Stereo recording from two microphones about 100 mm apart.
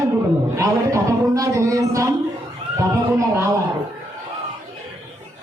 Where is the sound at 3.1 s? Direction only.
30° right (ahead or behind).